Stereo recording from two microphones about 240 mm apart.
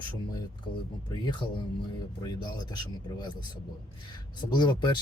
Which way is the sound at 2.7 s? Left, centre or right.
Centre.